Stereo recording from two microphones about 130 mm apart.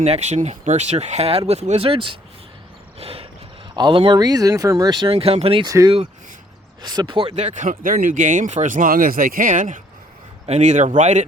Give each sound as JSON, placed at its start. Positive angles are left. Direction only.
{"t": 0.0, "sound": "speech", "side_deg": -60}
{"t": 3.0, "sound": "mechanisms", "side_deg": -50}
{"t": 3.8, "sound": "speech", "side_deg": -40}
{"t": 5.1, "sound": "speech", "side_deg": -50}
{"t": 5.6, "sound": "speech", "side_deg": -25}
{"t": 7.3, "sound": "speech", "side_deg": -65}
{"t": 10.4, "sound": "speech", "side_deg": -60}